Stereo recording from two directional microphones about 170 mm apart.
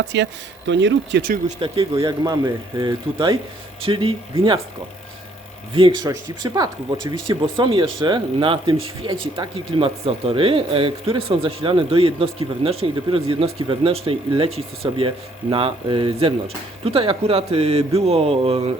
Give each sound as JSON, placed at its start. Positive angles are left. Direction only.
{"t": 0.1, "sound": "speech", "side_deg": -90}
{"t": 1.7, "sound": "speech", "side_deg": -20}
{"t": 5.7, "sound": "speech", "side_deg": -30}